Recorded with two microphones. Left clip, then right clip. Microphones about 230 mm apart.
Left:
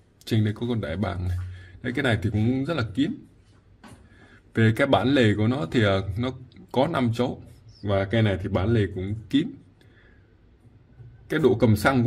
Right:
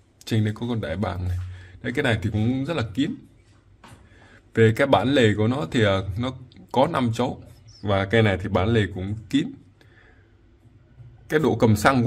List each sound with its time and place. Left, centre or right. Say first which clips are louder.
0.2 s speech: even; centre
4.5 s speech: right 3 dB; centre
11.2 s speech: right 1 dB; centre